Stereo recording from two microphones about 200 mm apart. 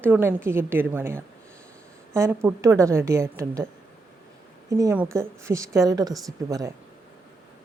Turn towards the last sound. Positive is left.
turn(degrees=-15)  # may be behind; listen again after turning